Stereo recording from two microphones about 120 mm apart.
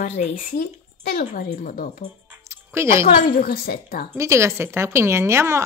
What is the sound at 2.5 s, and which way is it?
Speech, 20° right (ahead or behind).